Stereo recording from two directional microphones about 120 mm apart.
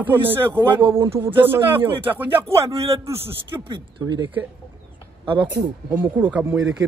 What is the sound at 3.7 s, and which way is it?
Speech, 35° right (ahead or behind).